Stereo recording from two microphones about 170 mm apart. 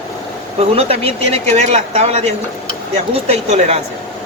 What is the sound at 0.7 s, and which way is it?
Speech, 35° right (ahead or behind).